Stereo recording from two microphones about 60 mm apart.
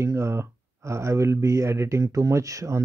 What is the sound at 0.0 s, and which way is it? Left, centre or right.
Speech, right.